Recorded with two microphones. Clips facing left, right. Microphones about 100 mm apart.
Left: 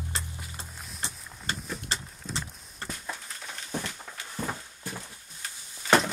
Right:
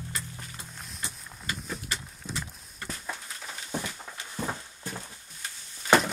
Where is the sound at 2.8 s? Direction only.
5° right (ahead or behind).